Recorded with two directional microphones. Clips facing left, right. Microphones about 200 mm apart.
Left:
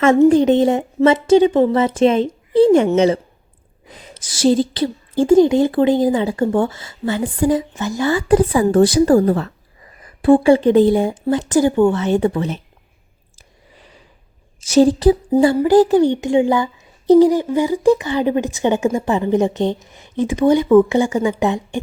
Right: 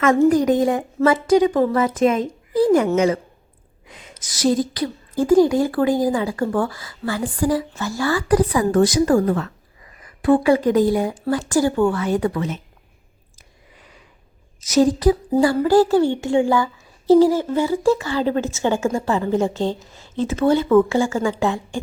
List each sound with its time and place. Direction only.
0.0 s a woman's voice: 25° left (ahead or behind)
14.6 s a woman's voice: 30° left (ahead or behind)